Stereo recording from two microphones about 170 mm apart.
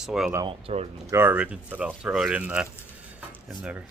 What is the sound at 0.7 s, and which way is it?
Speech, 35° right (ahead or behind).